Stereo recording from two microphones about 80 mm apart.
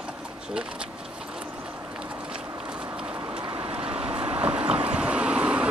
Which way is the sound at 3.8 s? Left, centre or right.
Centre.